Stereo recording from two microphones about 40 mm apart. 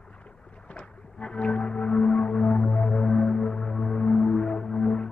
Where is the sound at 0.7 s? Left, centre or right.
Left.